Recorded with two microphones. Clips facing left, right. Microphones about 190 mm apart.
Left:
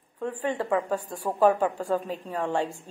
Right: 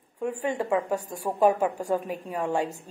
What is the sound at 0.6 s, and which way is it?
A man's voice, 10° right (ahead or behind).